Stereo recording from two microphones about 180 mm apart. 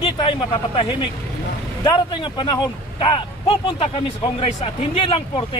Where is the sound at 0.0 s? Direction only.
30° left (ahead or behind).